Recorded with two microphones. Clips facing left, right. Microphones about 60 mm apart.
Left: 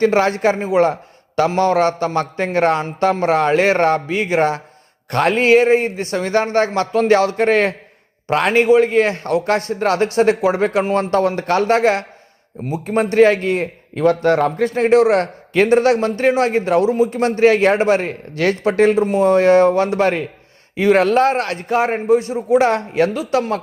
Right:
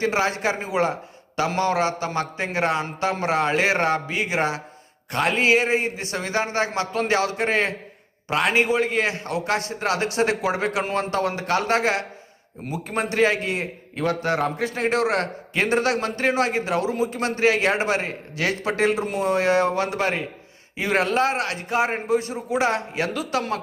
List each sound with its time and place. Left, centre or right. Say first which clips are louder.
0.0 s a man's voice: left 8 dB; left
14.8 s a man's voice: left 9 dB; left